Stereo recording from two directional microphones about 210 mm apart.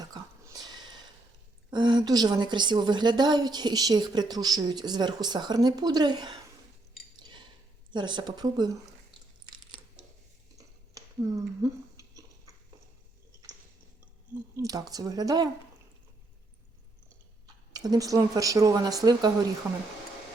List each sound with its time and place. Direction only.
0.0 s a sound: 20° right (ahead or behind)
1.7 s speech: 20° right (ahead or behind)
7.9 s speech: 20° right (ahead or behind)
10.9 s a sound: 15° right (ahead or behind)
14.5 s speech: 15° right (ahead or behind)
17.4 s speech: 20° right (ahead or behind)